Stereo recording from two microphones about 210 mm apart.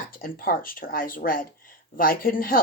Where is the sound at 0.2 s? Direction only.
45° left (ahead or behind).